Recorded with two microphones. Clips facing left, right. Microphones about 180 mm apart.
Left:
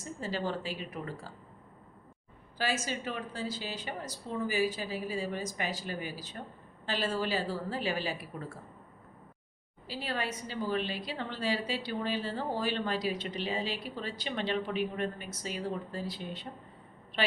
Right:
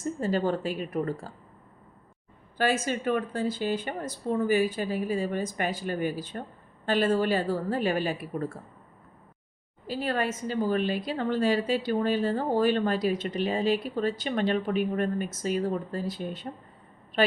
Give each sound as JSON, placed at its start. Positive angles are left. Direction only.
{"t": 0.0, "sound": "a woman's voice", "side_deg": -50}
{"t": 2.6, "sound": "a woman's voice", "side_deg": -55}
{"t": 9.8, "sound": "a woman's voice", "side_deg": -50}